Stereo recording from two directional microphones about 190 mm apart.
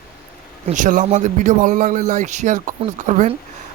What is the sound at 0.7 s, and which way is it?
A man's voice, 40° right (ahead or behind).